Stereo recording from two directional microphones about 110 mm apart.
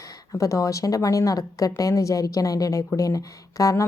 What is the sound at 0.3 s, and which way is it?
Speech, 30° left (ahead or behind).